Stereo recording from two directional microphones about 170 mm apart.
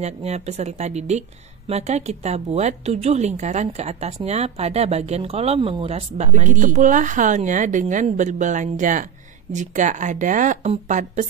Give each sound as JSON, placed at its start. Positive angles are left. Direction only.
{"t": 0.0, "sound": "a woman's voice", "side_deg": -40}